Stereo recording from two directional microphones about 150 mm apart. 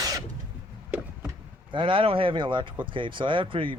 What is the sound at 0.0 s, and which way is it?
Cough, 20° right (ahead or behind).